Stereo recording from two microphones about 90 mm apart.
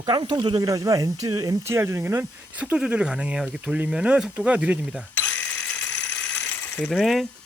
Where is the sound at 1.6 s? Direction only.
30° right (ahead or behind).